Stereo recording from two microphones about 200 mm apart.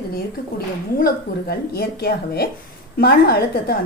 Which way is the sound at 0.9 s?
50° left (ahead or behind).